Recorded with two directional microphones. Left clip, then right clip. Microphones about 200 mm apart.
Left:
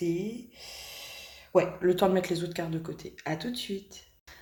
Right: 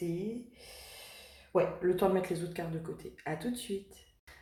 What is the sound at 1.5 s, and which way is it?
A woman's voice, 35° left (ahead or behind).